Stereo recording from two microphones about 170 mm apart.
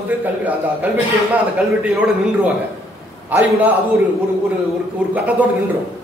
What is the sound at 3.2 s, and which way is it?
Speech, 10° right (ahead or behind).